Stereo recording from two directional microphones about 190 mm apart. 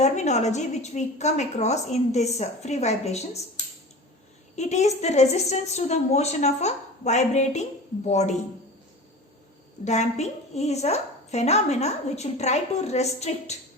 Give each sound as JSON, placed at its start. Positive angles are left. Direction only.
{"t": 0.0, "sound": "a woman's voice", "side_deg": 35}
{"t": 4.5, "sound": "a woman's voice", "side_deg": 35}
{"t": 9.8, "sound": "a woman's voice", "side_deg": 35}